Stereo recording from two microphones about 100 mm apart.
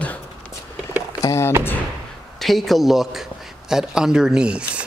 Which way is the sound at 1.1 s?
30° left (ahead or behind).